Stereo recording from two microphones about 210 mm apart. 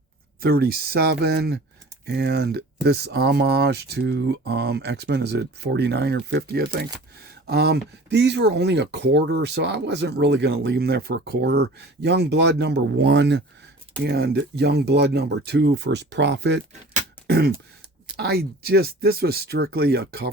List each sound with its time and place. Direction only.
0.4 s speech: 50° right (ahead or behind)
17.2 s throat clearing: 50° right (ahead or behind)
18.2 s speech: 50° right (ahead or behind)